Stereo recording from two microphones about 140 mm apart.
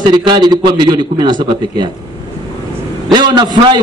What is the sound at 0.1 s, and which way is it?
A man's voice, 30° right (ahead or behind).